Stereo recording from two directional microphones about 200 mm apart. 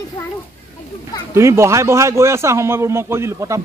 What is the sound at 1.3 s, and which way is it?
A man's voice, 15° right (ahead or behind).